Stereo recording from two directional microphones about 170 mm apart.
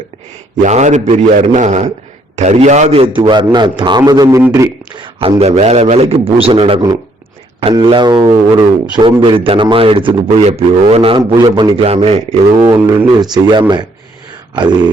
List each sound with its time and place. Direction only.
0.6 s a man's voice: 45° right (ahead or behind)
3.2 s a man's voice: 25° right (ahead or behind)
12.8 s a man's voice: 15° right (ahead or behind)